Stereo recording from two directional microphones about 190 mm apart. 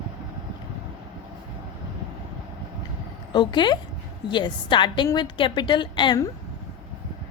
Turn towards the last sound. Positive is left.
turn(degrees=25)  # may be behind; listen again after turning